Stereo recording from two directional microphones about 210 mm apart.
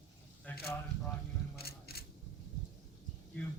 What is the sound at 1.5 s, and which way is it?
Scissors, 50° left (ahead or behind).